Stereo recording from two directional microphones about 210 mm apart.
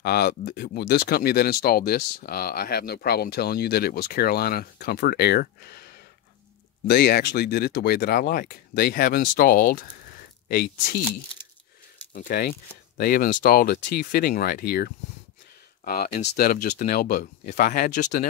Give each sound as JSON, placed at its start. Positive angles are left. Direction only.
{"t": 0.0, "sound": "speech", "side_deg": 50}
{"t": 12.1, "sound": "speech", "side_deg": 40}